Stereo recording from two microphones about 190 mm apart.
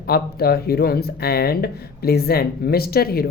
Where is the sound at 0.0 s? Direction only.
55° left (ahead or behind).